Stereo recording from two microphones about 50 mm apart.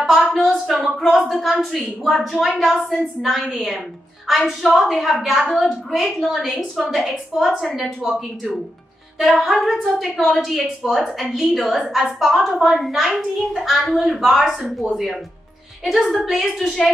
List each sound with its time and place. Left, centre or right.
0.0 s a woman's voice: centre
9.2 s a woman's voice: centre